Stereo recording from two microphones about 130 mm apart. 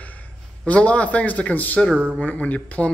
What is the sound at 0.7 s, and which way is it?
Speech, 10° left (ahead or behind).